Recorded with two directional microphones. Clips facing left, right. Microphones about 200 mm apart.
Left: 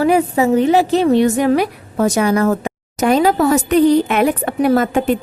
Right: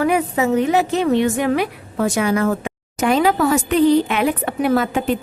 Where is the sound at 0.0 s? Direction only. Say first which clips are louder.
Left 4 dB; 30° left (ahead or behind).